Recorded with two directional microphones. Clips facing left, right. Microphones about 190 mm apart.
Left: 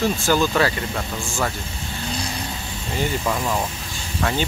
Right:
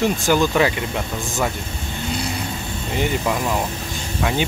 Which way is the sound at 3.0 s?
10° right (ahead or behind).